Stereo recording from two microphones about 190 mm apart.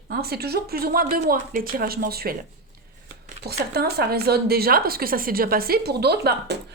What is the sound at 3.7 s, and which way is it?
A woman's voice, 55° right (ahead or behind).